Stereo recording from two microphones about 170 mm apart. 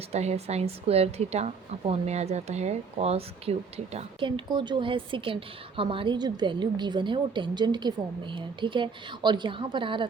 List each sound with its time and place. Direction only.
0.1 s a woman's voice: 40° right (ahead or behind)